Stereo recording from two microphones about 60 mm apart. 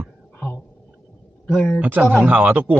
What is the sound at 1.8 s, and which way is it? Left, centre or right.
A man's voice, right.